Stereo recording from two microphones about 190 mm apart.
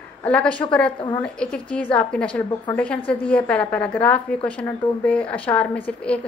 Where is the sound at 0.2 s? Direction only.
5° left (ahead or behind).